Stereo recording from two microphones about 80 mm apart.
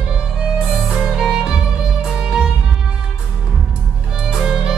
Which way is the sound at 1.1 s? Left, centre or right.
Centre.